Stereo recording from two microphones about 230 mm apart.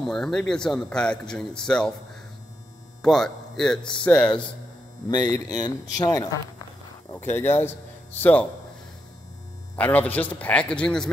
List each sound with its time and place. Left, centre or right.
0.0 s speech: centre
3.0 s speech: centre
5.6 s speech: centre
9.8 s speech: centre